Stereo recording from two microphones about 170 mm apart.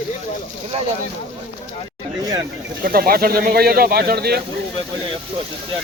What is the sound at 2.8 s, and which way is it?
Speech, 60° right (ahead or behind).